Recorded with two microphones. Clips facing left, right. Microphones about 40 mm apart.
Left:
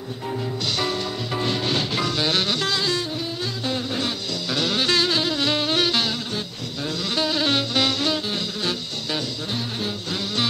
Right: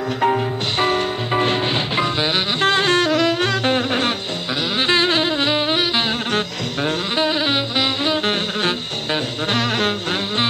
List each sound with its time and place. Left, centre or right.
0.7 s music: right
2.6 s saxophone: right
3.1 s saxophone: right
4.7 s music: right
7.2 s music: right
8.3 s music: right
9.5 s music: right